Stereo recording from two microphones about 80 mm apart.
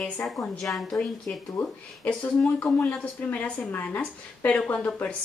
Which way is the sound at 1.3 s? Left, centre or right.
Left.